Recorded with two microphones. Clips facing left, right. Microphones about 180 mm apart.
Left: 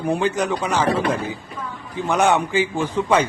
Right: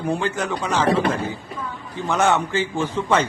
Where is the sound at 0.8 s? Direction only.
30° right (ahead or behind).